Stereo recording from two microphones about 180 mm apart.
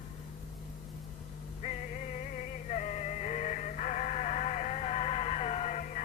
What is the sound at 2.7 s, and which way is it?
Music, 40° left (ahead or behind).